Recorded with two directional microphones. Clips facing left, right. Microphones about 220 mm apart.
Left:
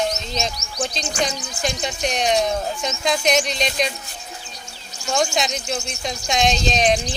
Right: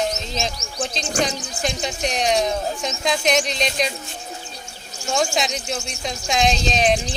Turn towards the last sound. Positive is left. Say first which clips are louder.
# even
turn(degrees=0)  # may be behind; listen again after turning